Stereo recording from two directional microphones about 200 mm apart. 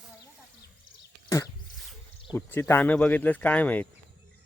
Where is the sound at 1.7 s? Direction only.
Centre (ahead or behind).